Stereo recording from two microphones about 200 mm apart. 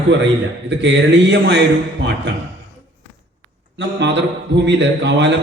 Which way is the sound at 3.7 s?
60° right (ahead or behind).